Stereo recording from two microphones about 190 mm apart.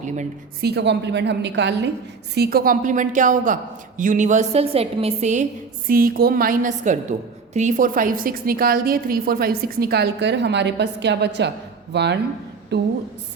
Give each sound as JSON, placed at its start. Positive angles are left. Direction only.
{"t": 0.6, "sound": "a woman's voice", "side_deg": -60}
{"t": 2.3, "sound": "a woman's voice", "side_deg": -55}
{"t": 5.9, "sound": "a woman's voice", "side_deg": -50}